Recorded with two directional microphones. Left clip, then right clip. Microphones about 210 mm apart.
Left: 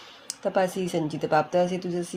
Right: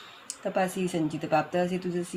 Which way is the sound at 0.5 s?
35° left (ahead or behind).